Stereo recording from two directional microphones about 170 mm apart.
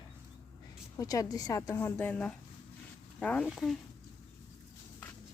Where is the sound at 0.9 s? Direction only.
20° left (ahead or behind); by 3.8 s centre (ahead or behind).